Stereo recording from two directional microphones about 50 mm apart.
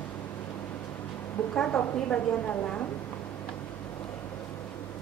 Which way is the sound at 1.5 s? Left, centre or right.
Left.